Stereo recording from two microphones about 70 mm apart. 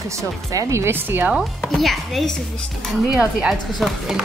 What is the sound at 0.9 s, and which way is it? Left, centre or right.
Speech, right.